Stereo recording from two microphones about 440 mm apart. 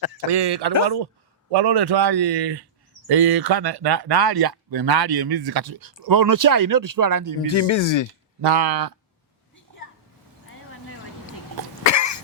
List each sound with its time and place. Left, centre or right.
0.3 s speech: right
7.4 s speech: left
8.4 s speech: right
11.8 s cough: left